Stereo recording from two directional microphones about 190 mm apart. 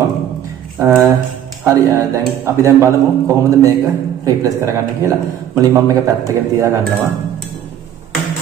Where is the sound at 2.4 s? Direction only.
15° right (ahead or behind).